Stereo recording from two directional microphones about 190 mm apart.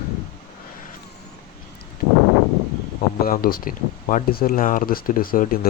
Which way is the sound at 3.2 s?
50° left (ahead or behind).